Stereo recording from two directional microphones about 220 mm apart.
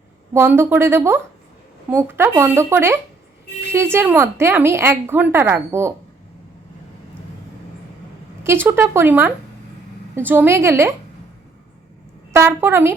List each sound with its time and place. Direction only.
0.3 s speech: 10° right (ahead or behind)
8.4 s speech: 10° right (ahead or behind)
12.3 s speech: 10° right (ahead or behind)